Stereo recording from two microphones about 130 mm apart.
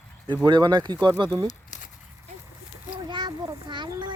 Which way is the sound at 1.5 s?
70° left (ahead or behind).